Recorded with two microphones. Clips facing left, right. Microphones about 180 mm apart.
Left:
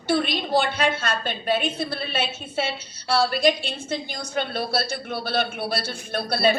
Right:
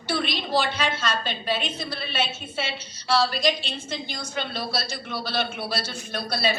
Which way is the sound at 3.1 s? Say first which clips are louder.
Left 3 dB; 55° left (ahead or behind).